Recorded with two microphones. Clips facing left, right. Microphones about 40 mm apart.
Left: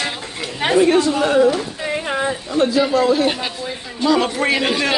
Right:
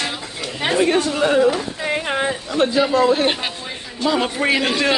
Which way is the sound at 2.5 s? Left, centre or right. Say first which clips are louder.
Left 1 dB; right.